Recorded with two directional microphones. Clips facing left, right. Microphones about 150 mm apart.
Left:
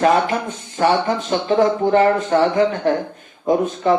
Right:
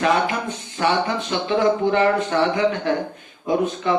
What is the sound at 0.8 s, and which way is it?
A man's voice, 45° left (ahead or behind).